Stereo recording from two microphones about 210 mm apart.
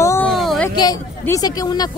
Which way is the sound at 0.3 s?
Centre (ahead or behind).